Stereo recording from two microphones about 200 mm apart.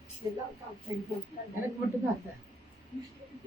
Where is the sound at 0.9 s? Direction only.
20° right (ahead or behind).